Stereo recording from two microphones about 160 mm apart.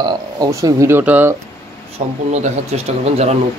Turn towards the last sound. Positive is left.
turn(degrees=-40)  # may be behind; listen again after turning